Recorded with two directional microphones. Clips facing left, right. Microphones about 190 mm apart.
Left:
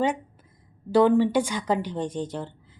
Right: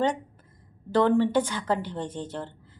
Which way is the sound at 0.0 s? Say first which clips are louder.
Left 1 dB; 10° left (ahead or behind).